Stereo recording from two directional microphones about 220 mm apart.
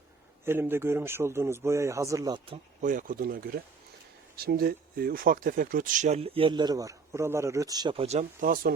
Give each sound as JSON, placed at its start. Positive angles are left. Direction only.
{"t": 0.4, "sound": "speech", "side_deg": -10}
{"t": 2.8, "sound": "speech", "side_deg": -35}